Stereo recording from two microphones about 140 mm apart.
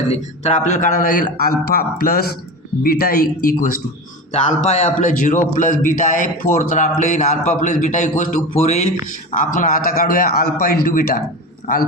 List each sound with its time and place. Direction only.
0.1 s a man's voice: 55° left (ahead or behind); by 3.7 s 90° left
4.3 s a man's voice: 55° left (ahead or behind); by 11.2 s 90° left